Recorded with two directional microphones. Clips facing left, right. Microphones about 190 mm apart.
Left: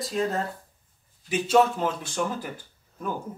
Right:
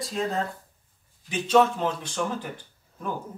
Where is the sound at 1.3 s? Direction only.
5° left (ahead or behind).